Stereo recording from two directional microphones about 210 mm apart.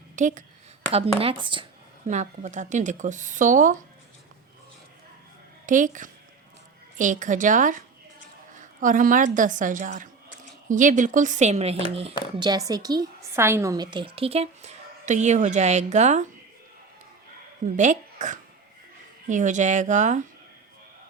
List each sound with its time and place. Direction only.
0.2 s a woman's voice: 35° right (ahead or behind)
2.0 s speech: 35° right (ahead or behind)
5.6 s a woman's voice: 40° right (ahead or behind)
12.4 s a woman's voice: 20° right (ahead or behind); by 16.2 s 35° right (ahead or behind)
17.7 s speech: 35° right (ahead or behind)